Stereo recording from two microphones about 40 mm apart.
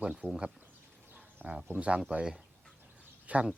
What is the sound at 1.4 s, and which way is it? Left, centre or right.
Speech, right.